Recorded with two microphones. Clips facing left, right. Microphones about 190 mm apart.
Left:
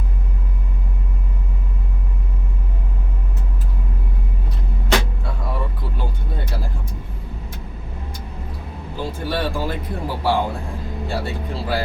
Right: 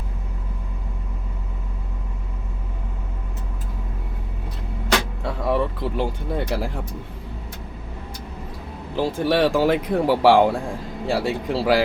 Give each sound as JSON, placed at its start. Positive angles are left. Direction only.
{"t": 5.2, "sound": "vehicle", "side_deg": -85}
{"t": 9.0, "sound": "speech", "side_deg": -90}